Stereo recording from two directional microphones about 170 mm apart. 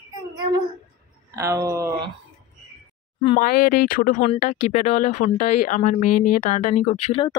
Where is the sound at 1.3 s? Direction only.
20° right (ahead or behind).